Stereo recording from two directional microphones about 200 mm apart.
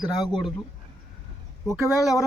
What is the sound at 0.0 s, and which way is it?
Speech, 20° left (ahead or behind).